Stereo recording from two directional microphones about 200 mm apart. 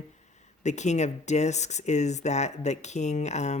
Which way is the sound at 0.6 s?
35° left (ahead or behind).